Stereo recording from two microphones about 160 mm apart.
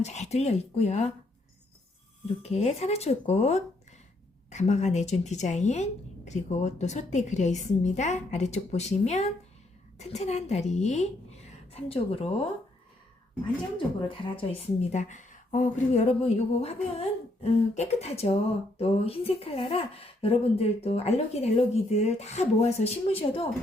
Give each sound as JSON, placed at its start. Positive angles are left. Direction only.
{"t": 0.0, "sound": "speech", "side_deg": 45}
{"t": 2.2, "sound": "a woman's voice", "side_deg": 40}
{"t": 14.8, "sound": "speech", "side_deg": 50}